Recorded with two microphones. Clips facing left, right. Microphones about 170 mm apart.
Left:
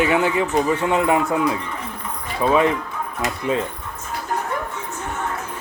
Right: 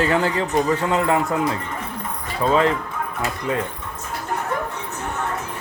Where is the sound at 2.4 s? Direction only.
15° left (ahead or behind).